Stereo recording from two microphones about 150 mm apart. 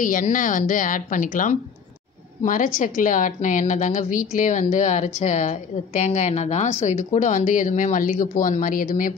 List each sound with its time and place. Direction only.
0.0 s a woman's voice: 60° left (ahead or behind)